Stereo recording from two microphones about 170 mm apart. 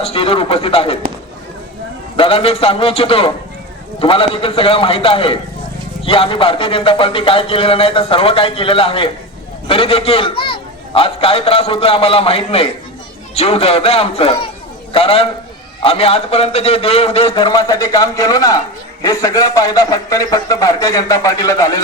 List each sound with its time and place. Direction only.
0.0 s speech: 35° left (ahead or behind)
2.1 s speech: 30° left (ahead or behind)